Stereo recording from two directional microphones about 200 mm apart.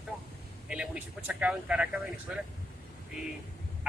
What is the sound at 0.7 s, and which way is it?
Speech, 5° right (ahead or behind).